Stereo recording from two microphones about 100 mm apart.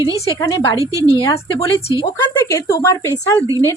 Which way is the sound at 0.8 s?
35° right (ahead or behind).